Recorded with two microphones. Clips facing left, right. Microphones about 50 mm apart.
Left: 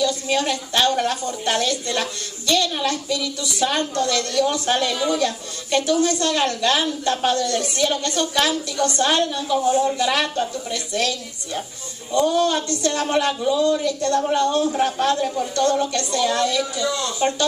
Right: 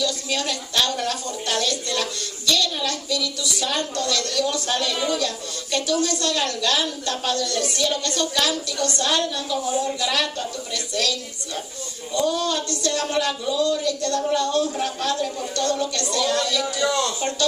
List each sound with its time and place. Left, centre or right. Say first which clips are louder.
0.0 s a woman's voice: left 4 dB; left
16.8 s speech: right 2 dB; right
17.2 s a woman's voice: left 3 dB; left